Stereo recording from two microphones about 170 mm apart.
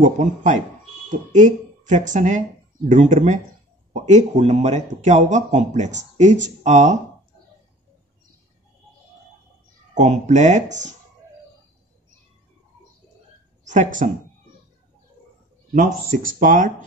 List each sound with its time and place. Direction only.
0.0 s speech: 45° right (ahead or behind)
9.9 s speech: 45° right (ahead or behind)
13.7 s speech: 50° right (ahead or behind)
15.7 s speech: 55° right (ahead or behind)